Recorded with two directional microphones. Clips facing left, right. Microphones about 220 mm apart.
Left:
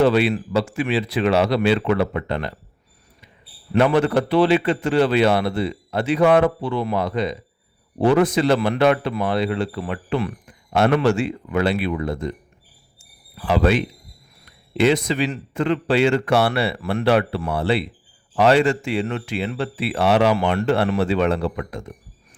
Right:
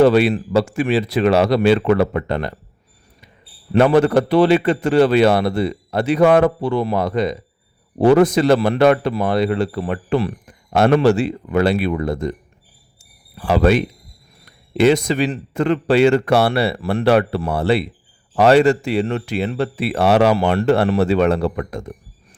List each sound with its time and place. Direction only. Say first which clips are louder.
0.0 s a man's voice: right 4 dB; 45° right (ahead or behind)
3.7 s a man's voice: right 4 dB; 45° right (ahead or behind)